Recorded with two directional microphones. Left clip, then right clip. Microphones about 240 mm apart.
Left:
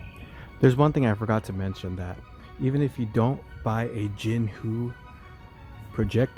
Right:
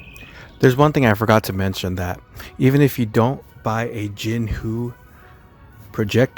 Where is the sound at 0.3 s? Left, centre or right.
Centre.